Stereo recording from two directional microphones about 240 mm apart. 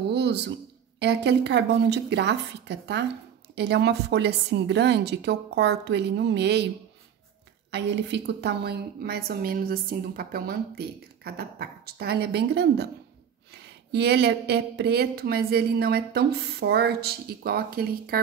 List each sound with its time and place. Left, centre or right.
0.1 s a sound: right
0.9 s a woman's voice: right
7.7 s speech: right